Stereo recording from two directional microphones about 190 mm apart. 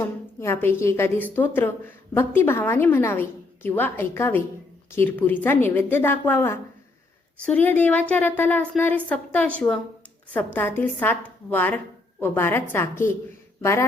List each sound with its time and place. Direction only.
0.0 s a woman's voice: 15° left (ahead or behind)